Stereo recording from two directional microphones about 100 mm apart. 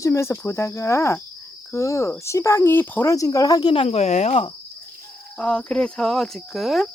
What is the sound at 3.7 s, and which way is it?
Speech, 80° left.